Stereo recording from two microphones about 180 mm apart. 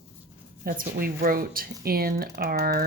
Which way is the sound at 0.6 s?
55° right (ahead or behind).